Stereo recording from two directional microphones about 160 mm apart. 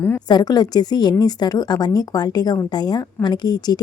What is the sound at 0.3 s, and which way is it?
A woman's voice, 25° left (ahead or behind).